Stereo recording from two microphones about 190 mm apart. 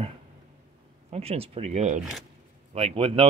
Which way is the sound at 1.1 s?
30° right (ahead or behind).